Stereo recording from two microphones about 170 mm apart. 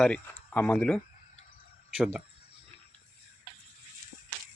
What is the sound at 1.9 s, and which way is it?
Speech, 5° right (ahead or behind).